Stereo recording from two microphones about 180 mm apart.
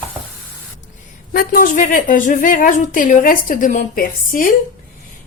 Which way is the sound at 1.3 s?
50° left (ahead or behind).